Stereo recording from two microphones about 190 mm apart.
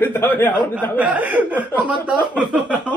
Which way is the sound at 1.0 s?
10° right (ahead or behind).